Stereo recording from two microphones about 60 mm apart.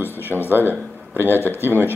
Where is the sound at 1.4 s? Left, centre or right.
Left.